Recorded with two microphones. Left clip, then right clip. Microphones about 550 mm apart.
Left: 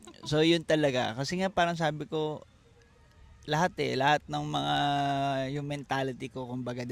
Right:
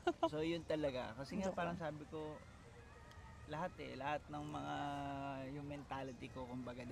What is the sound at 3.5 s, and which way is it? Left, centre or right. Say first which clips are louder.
Speech: left 18 dB; left.